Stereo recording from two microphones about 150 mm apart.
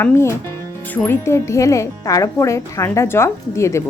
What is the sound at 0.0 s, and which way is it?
A woman's voice, 15° left (ahead or behind).